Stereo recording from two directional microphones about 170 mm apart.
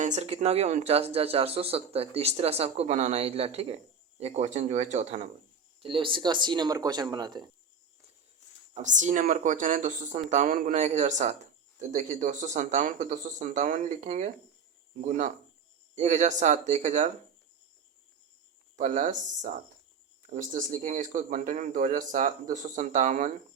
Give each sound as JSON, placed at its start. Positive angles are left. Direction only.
{"t": 0.0, "sound": "speech", "side_deg": -40}
{"t": 5.8, "sound": "speech", "side_deg": -30}
{"t": 8.7, "sound": "speech", "side_deg": -45}
{"t": 16.0, "sound": "speech", "side_deg": -45}
{"t": 18.8, "sound": "speech", "side_deg": -50}